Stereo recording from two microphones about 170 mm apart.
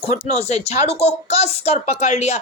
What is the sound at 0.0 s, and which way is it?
A woman's voice, 40° left (ahead or behind).